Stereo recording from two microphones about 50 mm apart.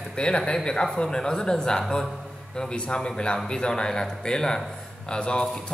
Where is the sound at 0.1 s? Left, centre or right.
Centre.